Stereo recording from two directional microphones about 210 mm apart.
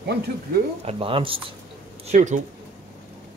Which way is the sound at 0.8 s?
25° right (ahead or behind).